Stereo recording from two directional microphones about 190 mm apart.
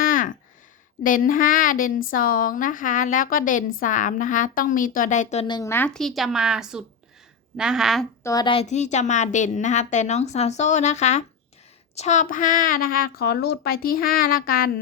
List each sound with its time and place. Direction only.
0.0 s a sound: 45° left (ahead or behind)
1.0 s a woman's voice: 45° left (ahead or behind)
5.5 s speech: 20° left (ahead or behind); by 8.0 s centre (ahead or behind)
8.2 s a woman's voice: 20° left (ahead or behind); by 14.7 s 50° left (ahead or behind)